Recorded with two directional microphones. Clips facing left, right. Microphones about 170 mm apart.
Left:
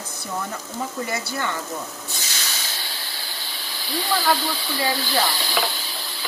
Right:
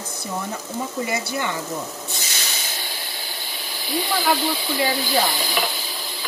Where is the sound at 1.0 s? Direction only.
20° right (ahead or behind).